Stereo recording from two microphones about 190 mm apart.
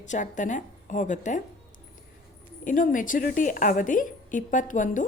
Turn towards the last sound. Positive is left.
turn(degrees=40)  # may be behind; listen again after turning